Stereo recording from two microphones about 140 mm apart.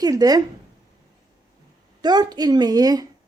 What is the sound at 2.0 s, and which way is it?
Speech, 30° right (ahead or behind).